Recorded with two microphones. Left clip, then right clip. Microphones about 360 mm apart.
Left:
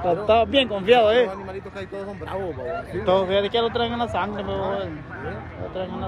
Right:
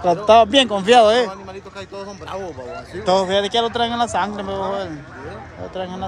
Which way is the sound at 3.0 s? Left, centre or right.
Centre.